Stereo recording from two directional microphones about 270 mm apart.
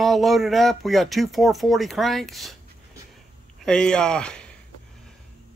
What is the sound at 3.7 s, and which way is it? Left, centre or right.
Speech, centre.